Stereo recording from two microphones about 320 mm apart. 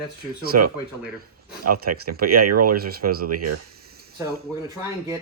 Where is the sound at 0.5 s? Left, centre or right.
Right.